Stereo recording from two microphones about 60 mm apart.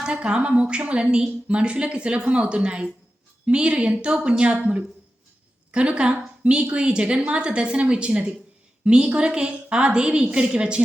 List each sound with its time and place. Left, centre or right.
0.0 s a woman's voice: centre